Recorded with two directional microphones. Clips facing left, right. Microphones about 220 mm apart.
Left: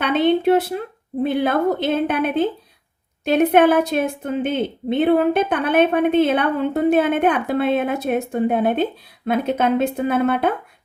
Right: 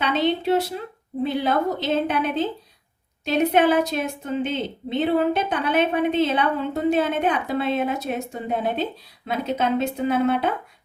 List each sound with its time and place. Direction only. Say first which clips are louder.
0.0 s a woman's voice: left 5 dB; 55° left (ahead or behind)